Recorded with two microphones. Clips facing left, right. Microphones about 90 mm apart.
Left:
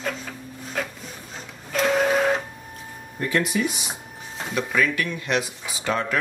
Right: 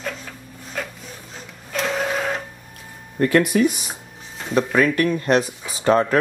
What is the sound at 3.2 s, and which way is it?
Speech, 55° right (ahead or behind).